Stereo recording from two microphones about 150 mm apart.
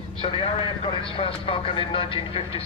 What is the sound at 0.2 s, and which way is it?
A man's voice, 35° left (ahead or behind).